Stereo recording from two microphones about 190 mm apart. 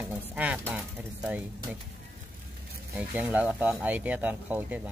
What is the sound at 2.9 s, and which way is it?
Speech, 10° right (ahead or behind).